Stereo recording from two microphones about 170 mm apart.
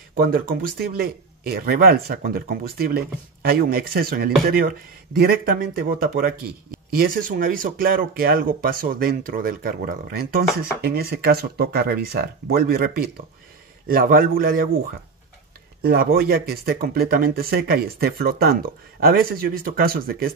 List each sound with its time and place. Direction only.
0.1 s speech: 55° right (ahead or behind)
15.8 s speech: 65° right (ahead or behind)